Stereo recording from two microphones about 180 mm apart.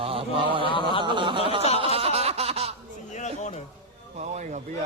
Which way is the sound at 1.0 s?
25° right (ahead or behind).